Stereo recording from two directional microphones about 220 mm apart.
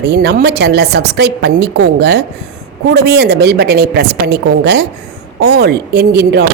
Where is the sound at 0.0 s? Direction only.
50° right (ahead or behind).